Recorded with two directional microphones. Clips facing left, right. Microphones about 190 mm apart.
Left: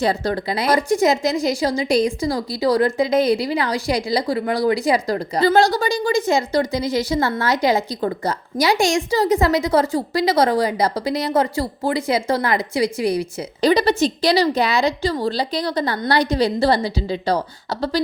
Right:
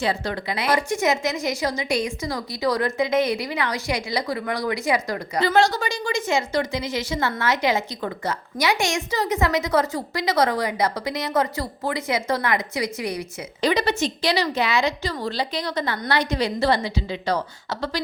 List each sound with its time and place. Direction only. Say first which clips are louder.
0.0 s a woman's voice: left 5 dB; 40° left (ahead or behind)